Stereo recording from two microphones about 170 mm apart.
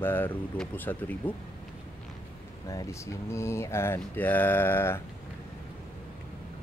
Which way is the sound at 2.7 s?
20° left (ahead or behind).